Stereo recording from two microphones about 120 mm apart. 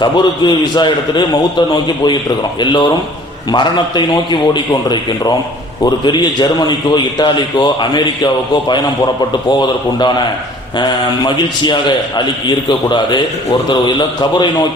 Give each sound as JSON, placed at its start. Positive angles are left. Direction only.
{"t": 0.0, "sound": "a man's voice", "side_deg": 35}
{"t": 3.5, "sound": "a man's voice", "side_deg": 40}